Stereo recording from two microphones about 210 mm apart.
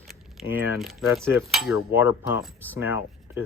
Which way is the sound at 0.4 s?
Centre (ahead or behind).